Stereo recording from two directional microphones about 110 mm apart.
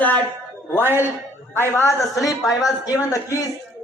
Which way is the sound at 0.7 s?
20° left (ahead or behind).